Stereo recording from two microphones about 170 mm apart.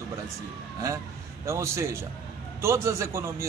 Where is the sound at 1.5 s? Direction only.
15° right (ahead or behind).